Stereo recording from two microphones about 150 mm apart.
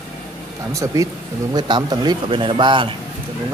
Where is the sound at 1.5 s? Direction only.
30° right (ahead or behind).